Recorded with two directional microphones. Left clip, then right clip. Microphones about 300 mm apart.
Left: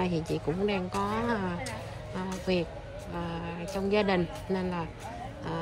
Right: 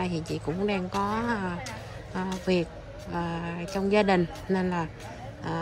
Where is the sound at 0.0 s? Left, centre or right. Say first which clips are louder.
Left 1 dB; centre.